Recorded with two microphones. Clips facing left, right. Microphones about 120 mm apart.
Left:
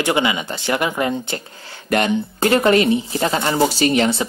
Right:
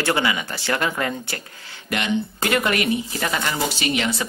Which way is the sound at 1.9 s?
45° left (ahead or behind).